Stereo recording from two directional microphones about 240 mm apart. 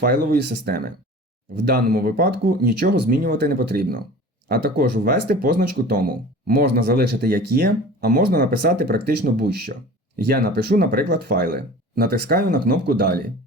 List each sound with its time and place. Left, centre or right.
0.0 s speech: right